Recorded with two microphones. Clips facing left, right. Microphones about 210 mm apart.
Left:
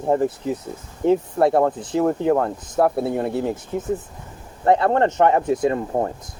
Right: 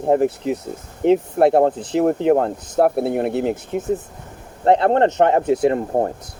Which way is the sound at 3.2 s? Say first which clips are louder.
Right 3 dB; 70° right (ahead or behind).